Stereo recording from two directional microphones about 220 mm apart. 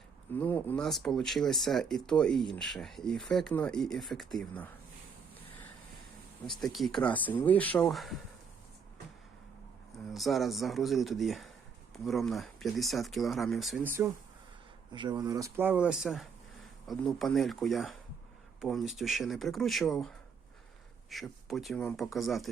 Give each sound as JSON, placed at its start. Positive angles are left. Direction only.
{"t": 0.3, "sound": "speech", "side_deg": 10}
{"t": 6.6, "sound": "speech", "side_deg": 0}
{"t": 10.1, "sound": "speech", "side_deg": 0}
{"t": 14.9, "sound": "speech", "side_deg": -20}